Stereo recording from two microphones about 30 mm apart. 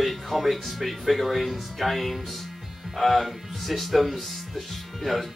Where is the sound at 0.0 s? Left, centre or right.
Centre.